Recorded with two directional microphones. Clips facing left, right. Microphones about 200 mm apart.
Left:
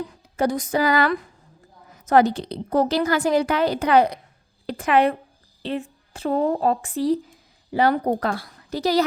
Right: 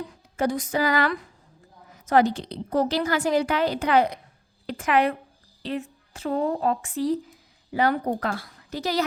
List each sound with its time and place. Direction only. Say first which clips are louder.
0.3 s a woman's voice: left 3 dB; 40° left (ahead or behind)